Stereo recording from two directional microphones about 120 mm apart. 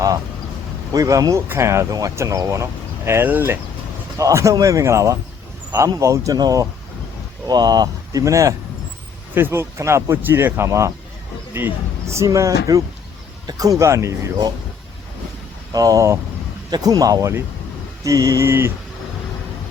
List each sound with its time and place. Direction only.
0.9 s speech: 30° right (ahead or behind)
15.7 s speech: 30° right (ahead or behind)